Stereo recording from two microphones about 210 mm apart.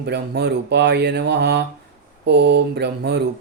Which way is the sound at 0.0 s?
50° right (ahead or behind).